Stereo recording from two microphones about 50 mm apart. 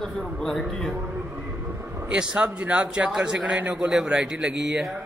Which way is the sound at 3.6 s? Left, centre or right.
Right.